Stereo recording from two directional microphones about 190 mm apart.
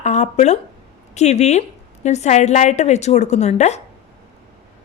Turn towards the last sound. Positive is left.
turn(degrees=35)  # may be behind; listen again after turning